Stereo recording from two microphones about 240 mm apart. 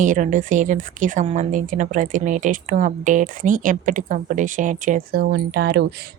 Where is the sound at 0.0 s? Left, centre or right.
Right.